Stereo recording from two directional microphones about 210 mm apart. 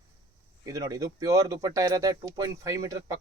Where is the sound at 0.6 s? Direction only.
15° right (ahead or behind).